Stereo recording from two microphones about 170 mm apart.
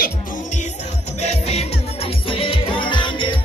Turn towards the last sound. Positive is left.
turn(degrees=30)  # may be behind; listen again after turning